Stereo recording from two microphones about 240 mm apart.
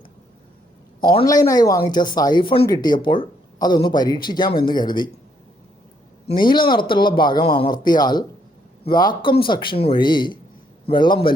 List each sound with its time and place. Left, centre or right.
1.0 s speech: centre
6.3 s speech: centre